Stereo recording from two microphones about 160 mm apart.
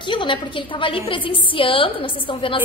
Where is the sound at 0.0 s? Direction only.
30° left (ahead or behind).